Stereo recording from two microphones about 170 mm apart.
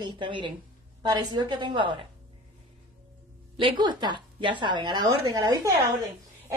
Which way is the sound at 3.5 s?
30° right (ahead or behind).